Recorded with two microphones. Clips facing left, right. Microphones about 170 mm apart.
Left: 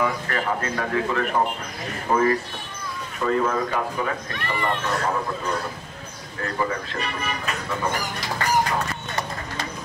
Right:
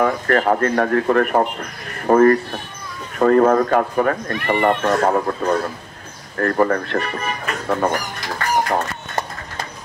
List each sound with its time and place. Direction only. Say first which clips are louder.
0.0 s speech: right 8 dB; 50° right (ahead or behind)
8.6 s music: right 4 dB; 50° right (ahead or behind)